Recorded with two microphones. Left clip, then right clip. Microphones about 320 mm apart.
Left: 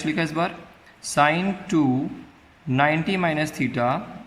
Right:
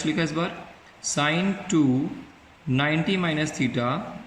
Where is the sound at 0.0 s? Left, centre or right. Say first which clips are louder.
Left 2 dB; left.